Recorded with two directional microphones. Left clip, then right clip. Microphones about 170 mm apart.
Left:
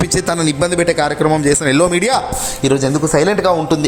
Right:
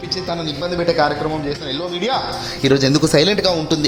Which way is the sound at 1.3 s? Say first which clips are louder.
Left 10 dB; 50° left (ahead or behind).